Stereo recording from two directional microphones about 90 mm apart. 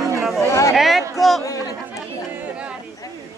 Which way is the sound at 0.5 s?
35° left (ahead or behind).